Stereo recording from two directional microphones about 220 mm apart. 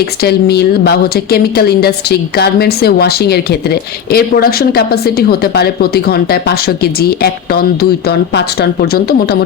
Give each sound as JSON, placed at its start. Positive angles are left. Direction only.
{"t": 0.2, "sound": "a woman's voice", "side_deg": 45}